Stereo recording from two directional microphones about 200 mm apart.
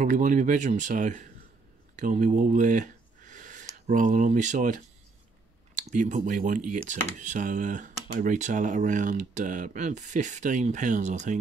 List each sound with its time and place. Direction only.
0.0 s speech: 40° right (ahead or behind)